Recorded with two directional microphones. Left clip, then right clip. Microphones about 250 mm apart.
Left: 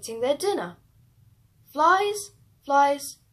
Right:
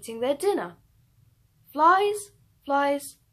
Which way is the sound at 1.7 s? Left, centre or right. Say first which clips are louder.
Right 1 dB; right.